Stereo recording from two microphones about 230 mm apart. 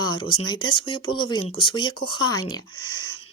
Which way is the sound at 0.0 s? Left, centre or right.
Centre.